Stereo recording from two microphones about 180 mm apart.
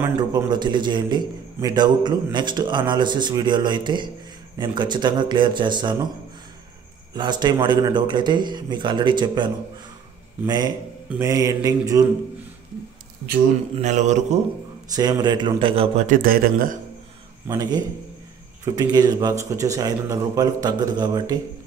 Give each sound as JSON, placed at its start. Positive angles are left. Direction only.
{"t": 0.3, "sound": "a man's voice", "side_deg": -25}
{"t": 7.2, "sound": "a man's voice", "side_deg": -25}
{"t": 13.7, "sound": "a man's voice", "side_deg": -40}
{"t": 14.9, "sound": "a man's voice", "side_deg": -20}
{"t": 16.1, "sound": "speech", "side_deg": -50}
{"t": 17.5, "sound": "a man's voice", "side_deg": -20}